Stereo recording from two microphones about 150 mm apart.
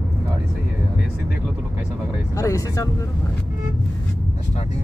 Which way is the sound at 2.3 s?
20° left (ahead or behind).